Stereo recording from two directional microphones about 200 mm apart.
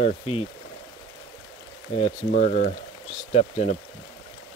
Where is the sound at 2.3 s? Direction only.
45° left (ahead or behind).